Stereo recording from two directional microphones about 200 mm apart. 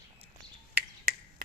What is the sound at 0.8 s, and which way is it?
Finger snapping, 50° right (ahead or behind).